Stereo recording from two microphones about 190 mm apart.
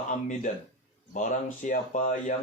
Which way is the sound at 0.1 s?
40° left (ahead or behind).